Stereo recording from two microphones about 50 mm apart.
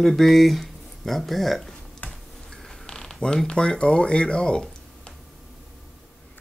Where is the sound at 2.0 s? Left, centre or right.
Left.